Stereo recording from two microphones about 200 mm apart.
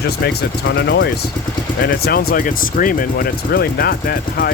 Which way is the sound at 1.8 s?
50° left (ahead or behind).